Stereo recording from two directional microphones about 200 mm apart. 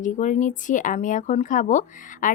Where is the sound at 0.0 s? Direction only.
40° left (ahead or behind).